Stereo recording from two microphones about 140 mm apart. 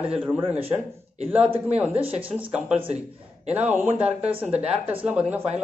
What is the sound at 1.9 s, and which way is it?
Speech, 40° right (ahead or behind).